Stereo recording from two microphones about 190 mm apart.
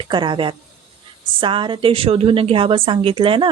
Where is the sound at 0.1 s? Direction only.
25° right (ahead or behind).